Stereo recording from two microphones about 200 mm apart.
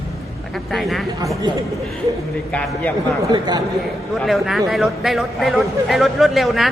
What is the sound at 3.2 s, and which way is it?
Speech, 20° right (ahead or behind).